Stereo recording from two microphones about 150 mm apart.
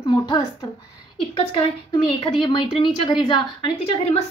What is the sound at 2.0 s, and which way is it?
A woman's voice, 35° left (ahead or behind).